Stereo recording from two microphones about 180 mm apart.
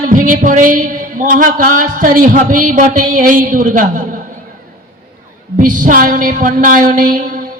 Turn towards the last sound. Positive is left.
turn(degrees=-50)  # may be behind; listen again after turning